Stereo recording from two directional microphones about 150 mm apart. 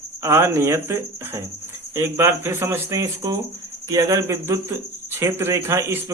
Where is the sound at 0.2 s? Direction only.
15° right (ahead or behind).